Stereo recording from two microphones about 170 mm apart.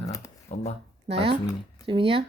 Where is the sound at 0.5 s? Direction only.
45° left (ahead or behind).